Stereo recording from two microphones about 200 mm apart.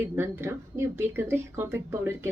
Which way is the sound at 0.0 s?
10° right (ahead or behind).